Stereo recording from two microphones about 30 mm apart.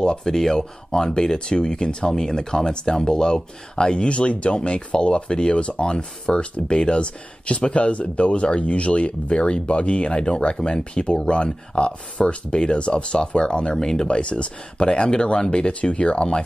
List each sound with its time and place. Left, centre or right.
0.2 s speech: centre; by 7.1 s left
7.6 s speech: left
14.0 s speech: left